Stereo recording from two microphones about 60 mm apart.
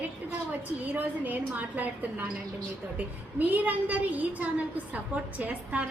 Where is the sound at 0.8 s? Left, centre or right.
Right.